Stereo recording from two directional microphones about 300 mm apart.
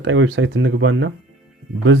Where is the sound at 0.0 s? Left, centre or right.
Right.